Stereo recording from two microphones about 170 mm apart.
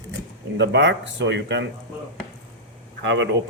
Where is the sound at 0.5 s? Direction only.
90° right.